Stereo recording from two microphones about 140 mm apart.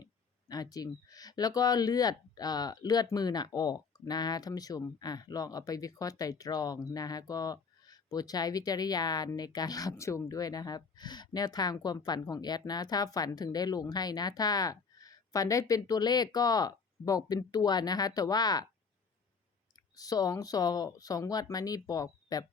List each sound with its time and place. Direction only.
0.0 s speech: 30° left (ahead or behind)
19.7 s speech: 25° left (ahead or behind)